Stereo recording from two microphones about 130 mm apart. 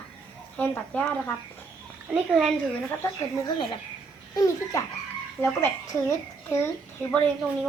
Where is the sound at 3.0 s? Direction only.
25° left (ahead or behind).